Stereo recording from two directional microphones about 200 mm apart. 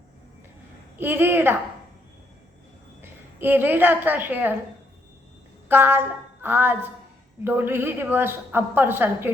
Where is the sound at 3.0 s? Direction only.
10° right (ahead or behind).